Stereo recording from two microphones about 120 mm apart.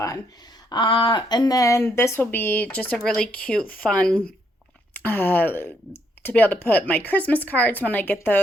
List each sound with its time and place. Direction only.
0.7 s speech: 45° left (ahead or behind); by 8.4 s 15° left (ahead or behind)